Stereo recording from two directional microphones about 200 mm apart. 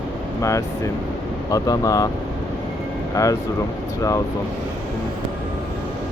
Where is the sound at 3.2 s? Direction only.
15° left (ahead or behind).